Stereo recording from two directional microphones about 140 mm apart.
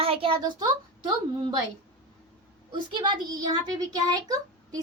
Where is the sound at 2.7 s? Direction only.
35° right (ahead or behind).